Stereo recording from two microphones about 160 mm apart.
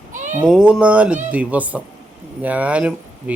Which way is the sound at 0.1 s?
50° right (ahead or behind).